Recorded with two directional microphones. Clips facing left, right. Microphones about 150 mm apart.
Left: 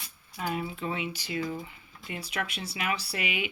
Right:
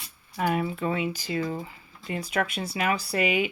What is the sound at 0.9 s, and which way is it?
Speech, 45° right (ahead or behind).